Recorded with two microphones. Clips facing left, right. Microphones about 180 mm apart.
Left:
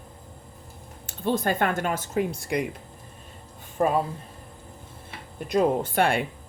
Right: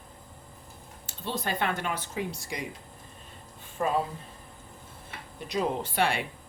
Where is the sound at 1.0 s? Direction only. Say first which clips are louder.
Left 8 dB; 50° left (ahead or behind).